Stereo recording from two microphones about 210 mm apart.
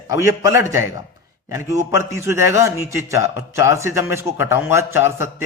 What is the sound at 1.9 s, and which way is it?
A man's voice, 15° right (ahead or behind).